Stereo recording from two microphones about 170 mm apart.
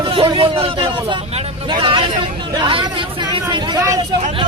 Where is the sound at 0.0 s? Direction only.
30° right (ahead or behind).